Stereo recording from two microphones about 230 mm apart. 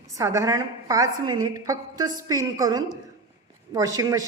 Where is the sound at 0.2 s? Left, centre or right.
Centre.